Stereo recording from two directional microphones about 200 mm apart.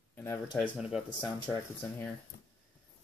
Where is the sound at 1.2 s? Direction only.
15° left (ahead or behind).